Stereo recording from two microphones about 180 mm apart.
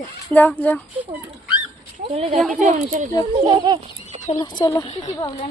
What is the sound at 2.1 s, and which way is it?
Speech, 30° right (ahead or behind).